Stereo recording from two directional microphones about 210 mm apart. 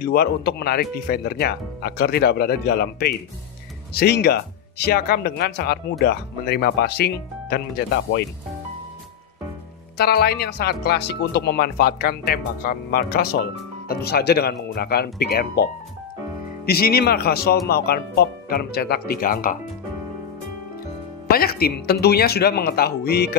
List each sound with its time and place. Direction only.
0.0 s speech: 50° left (ahead or behind)
9.9 s speech: 50° left (ahead or behind)
21.3 s speech: 45° left (ahead or behind)